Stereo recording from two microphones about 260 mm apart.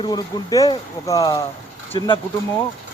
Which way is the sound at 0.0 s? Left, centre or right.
Centre.